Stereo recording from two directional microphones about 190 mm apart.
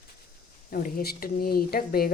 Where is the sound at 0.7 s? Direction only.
50° left (ahead or behind).